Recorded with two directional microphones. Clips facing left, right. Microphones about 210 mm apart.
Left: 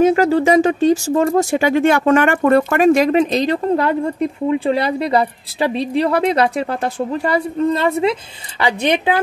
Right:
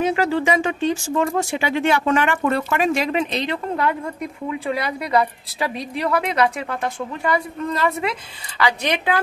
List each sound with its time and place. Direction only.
0.0 s speech: 40° left (ahead or behind); by 9.2 s 25° left (ahead or behind)